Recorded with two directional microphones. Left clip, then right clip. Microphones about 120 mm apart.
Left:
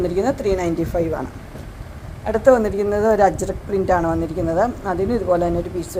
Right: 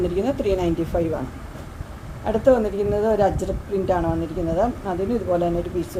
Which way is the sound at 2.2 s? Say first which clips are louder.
Left 3 dB; 30° left (ahead or behind).